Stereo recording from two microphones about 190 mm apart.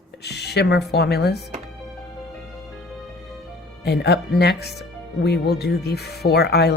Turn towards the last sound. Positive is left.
turn(degrees=60)  # may be behind; listen again after turning